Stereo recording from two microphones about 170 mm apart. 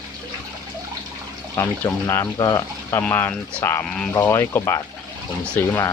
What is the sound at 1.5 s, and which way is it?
Speech, 15° left (ahead or behind).